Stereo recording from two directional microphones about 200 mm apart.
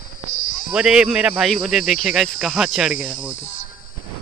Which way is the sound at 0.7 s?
5° right (ahead or behind).